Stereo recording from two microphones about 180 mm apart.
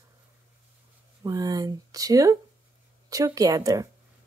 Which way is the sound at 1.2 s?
20° right (ahead or behind).